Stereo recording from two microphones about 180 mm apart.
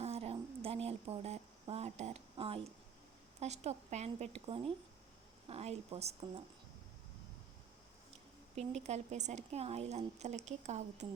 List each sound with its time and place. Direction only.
0.0 s a sound: 35° right (ahead or behind)
2.3 s a woman's voice: 30° right (ahead or behind)
8.5 s a woman's voice: 40° right (ahead or behind)